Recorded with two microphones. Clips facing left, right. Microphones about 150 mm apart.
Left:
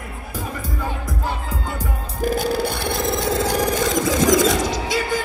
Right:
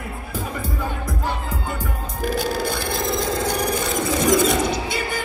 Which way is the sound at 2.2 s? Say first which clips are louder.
Left 2 dB; 55° left (ahead or behind).